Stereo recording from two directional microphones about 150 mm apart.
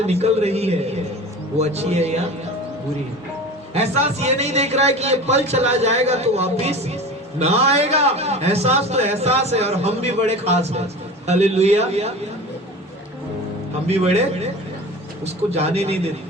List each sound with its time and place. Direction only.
0.0 s a man's voice: 45° right (ahead or behind)
3.8 s a man's voice: 45° right (ahead or behind)
13.8 s a man's voice: 45° right (ahead or behind)